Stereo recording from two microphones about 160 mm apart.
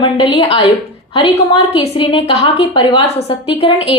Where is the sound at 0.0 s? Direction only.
30° left (ahead or behind).